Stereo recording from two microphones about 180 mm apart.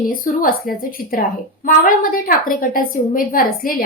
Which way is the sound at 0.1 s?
50° left (ahead or behind).